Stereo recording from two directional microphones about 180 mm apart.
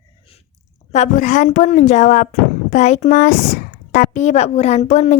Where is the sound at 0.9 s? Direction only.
40° left (ahead or behind).